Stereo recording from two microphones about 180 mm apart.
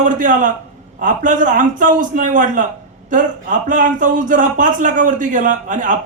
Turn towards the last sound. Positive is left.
turn(degrees=-45)  # may be behind; listen again after turning